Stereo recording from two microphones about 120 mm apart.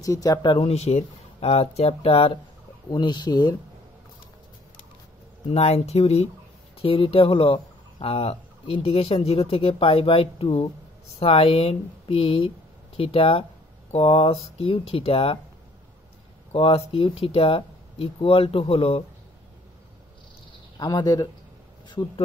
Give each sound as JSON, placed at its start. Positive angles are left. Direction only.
{"t": 0.0, "sound": "speech", "side_deg": 30}
{"t": 0.7, "sound": "speech", "side_deg": 65}
{"t": 2.9, "sound": "speech", "side_deg": 40}
{"t": 5.5, "sound": "speech", "side_deg": 60}
{"t": 16.5, "sound": "speech", "side_deg": 55}
{"t": 20.8, "sound": "speech", "side_deg": 35}